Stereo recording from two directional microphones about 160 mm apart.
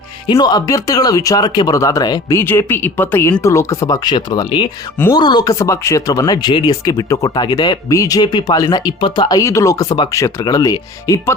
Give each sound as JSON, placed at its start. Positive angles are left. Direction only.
{"t": 0.3, "sound": "speech", "side_deg": 25}